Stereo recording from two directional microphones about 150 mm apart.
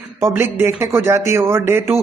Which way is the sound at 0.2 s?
15° right (ahead or behind).